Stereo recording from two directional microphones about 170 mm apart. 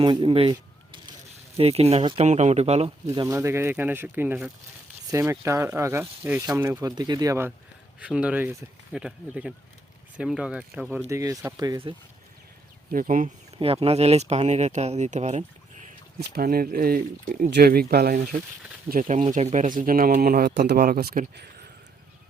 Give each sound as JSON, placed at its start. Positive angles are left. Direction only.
{"t": 0.0, "sound": "speech", "side_deg": -25}
{"t": 3.2, "sound": "speech", "side_deg": -15}
{"t": 7.9, "sound": "speech", "side_deg": -5}
{"t": 11.1, "sound": "speech", "side_deg": -15}
{"t": 12.9, "sound": "speech", "side_deg": -55}
{"t": 13.6, "sound": "speech", "side_deg": -35}
{"t": 16.3, "sound": "speech", "side_deg": -60}
{"t": 18.9, "sound": "speech", "side_deg": -50}